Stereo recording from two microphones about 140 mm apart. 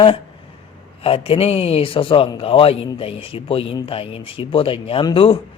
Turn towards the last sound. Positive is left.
turn(degrees=40)  # may be behind; listen again after turning